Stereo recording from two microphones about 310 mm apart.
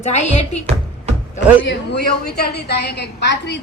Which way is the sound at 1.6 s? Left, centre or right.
Left.